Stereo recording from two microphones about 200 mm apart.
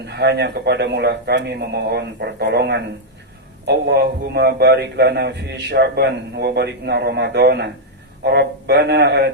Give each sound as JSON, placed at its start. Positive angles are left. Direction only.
{"t": 0.0, "sound": "a man's voice", "side_deg": -55}